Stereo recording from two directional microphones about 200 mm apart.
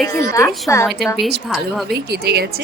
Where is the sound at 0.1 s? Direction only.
15° left (ahead or behind).